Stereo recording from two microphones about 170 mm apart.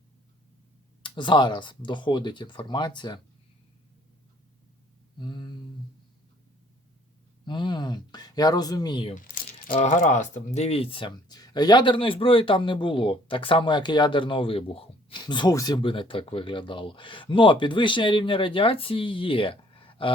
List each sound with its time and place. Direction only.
1.0 s speech: 30° left (ahead or behind)
5.1 s speech: 25° left (ahead or behind)
7.4 s speech: 25° left (ahead or behind)
9.1 s a sound: 50° left (ahead or behind)
9.7 s speech: 45° left (ahead or behind)